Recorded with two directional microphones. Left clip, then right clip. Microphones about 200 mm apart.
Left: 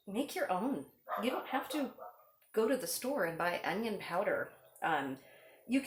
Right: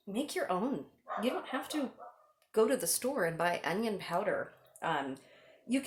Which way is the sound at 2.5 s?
40° right (ahead or behind).